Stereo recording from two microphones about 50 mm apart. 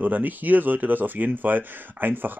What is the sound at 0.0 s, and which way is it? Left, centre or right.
Speech, right.